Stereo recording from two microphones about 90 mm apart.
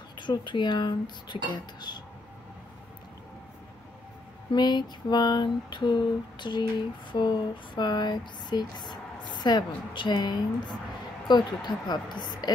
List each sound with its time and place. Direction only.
0.2 s speech: 55° left (ahead or behind)
4.5 s a sound: 55° left (ahead or behind)
11.2 s speech: 55° left (ahead or behind)